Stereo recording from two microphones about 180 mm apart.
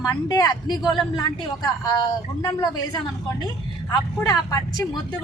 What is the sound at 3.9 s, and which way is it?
Speech, 20° left (ahead or behind).